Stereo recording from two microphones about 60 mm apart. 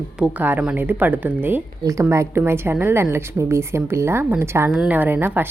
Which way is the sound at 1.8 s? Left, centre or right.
Right.